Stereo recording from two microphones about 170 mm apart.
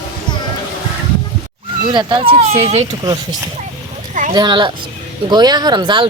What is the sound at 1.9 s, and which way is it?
Speech, 30° right (ahead or behind).